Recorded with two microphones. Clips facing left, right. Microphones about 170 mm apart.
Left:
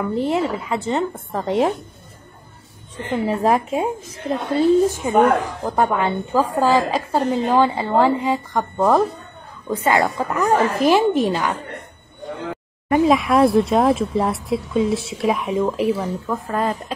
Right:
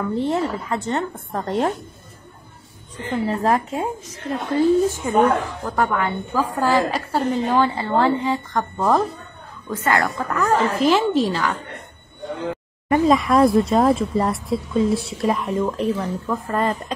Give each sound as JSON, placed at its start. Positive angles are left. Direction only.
{"t": 0.0, "sound": "speech", "side_deg": 0}
{"t": 3.1, "sound": "a woman's voice", "side_deg": 15}
{"t": 13.0, "sound": "speech", "side_deg": 0}